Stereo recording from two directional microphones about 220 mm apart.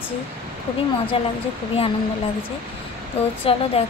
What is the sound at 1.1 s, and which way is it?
Speech, 25° left (ahead or behind).